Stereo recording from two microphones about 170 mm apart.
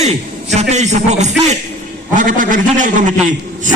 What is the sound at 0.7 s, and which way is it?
A man's voice, 40° right (ahead or behind).